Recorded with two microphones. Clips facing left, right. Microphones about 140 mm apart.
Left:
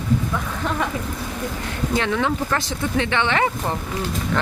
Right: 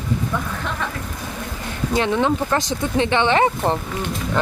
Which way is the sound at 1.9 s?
20° right (ahead or behind).